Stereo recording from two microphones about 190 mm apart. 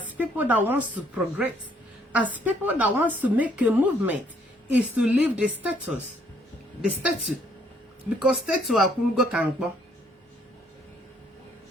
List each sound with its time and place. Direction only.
0.0 s a woman's voice: 10° right (ahead or behind)
8.2 s speech: 5° right (ahead or behind)